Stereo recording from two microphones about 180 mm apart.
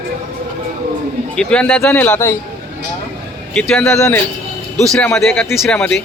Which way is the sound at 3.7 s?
10° left (ahead or behind).